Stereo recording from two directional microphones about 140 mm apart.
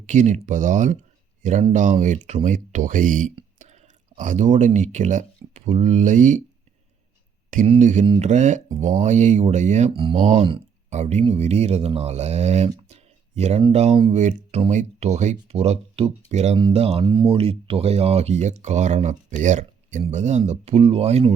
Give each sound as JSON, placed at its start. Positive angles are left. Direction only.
{"t": 0.0, "sound": "speech", "side_deg": -60}
{"t": 3.6, "sound": "speech", "side_deg": -55}
{"t": 7.8, "sound": "speech", "side_deg": -60}
{"t": 9.9, "sound": "speech", "side_deg": -40}
{"t": 10.2, "sound": "speech", "side_deg": -55}
{"t": 13.0, "sound": "a sound", "side_deg": -50}
{"t": 13.7, "sound": "speech", "side_deg": -45}
{"t": 14.2, "sound": "speech", "side_deg": -60}
{"t": 16.6, "sound": "speech", "side_deg": -40}